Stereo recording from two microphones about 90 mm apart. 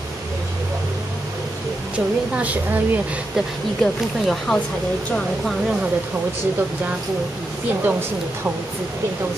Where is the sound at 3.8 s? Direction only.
10° left (ahead or behind).